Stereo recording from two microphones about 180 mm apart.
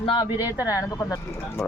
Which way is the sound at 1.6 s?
Centre (ahead or behind).